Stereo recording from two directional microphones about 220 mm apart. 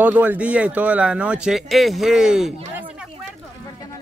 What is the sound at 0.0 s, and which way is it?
Speech, 5° right (ahead or behind).